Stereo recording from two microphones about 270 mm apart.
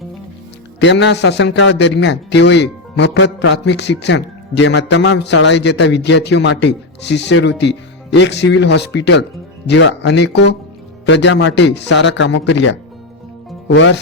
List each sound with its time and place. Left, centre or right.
0.8 s a man's voice: left